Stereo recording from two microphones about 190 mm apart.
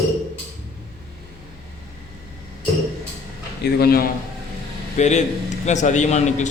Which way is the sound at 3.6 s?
55° left (ahead or behind).